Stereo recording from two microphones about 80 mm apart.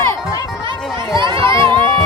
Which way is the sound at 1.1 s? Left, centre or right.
Right.